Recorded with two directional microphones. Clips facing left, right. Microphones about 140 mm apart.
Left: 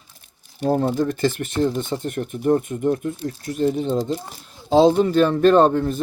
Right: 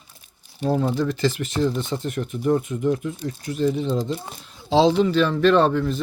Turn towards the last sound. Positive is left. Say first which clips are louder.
# left 3 dB
turn(degrees=45)  # may be behind; listen again after turning